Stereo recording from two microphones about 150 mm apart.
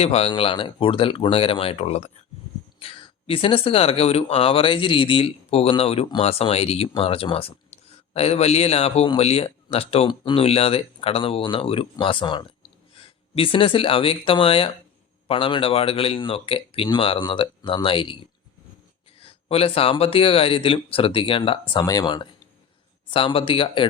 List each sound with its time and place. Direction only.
0.0 s speech: 40° left (ahead or behind)
19.2 s speech: 40° left (ahead or behind)